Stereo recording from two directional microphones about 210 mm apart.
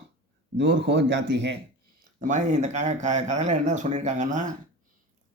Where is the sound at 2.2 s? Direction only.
35° right (ahead or behind).